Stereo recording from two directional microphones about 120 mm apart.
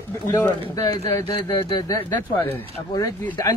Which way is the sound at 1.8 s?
30° left (ahead or behind).